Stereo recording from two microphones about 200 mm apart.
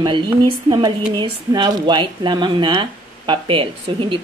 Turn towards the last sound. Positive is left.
turn(degrees=-25)  # may be behind; listen again after turning